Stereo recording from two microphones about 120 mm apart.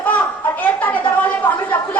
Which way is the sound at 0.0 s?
15° left (ahead or behind).